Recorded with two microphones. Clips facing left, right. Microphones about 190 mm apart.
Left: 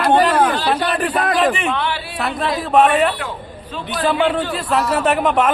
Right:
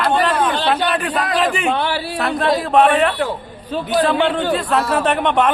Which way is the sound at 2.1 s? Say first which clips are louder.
Right 5 dB; centre (ahead or behind).